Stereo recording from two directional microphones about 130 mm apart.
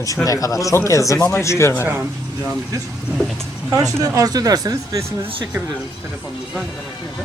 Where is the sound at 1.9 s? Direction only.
15° right (ahead or behind).